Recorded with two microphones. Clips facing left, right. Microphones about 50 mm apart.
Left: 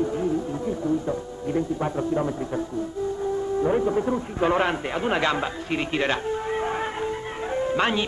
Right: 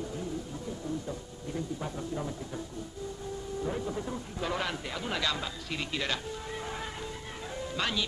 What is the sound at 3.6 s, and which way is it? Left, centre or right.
A man's voice, left.